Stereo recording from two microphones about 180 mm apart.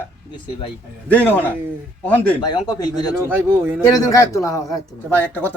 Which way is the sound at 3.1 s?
10° right (ahead or behind).